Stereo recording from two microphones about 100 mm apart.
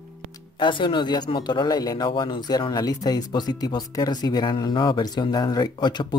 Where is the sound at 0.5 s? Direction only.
55° left (ahead or behind).